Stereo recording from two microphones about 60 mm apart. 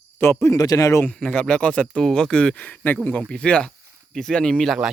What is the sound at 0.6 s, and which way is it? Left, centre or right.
Speech, left.